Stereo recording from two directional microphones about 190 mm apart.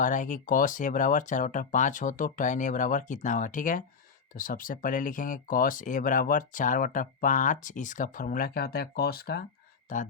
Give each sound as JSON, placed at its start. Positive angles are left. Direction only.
{"t": 0.0, "sound": "speech", "side_deg": 40}
{"t": 9.9, "sound": "speech", "side_deg": 40}